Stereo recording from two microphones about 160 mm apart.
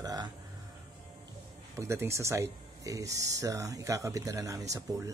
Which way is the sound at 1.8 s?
15° right (ahead or behind).